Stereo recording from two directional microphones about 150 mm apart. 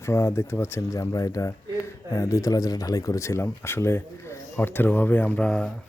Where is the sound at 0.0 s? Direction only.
20° left (ahead or behind).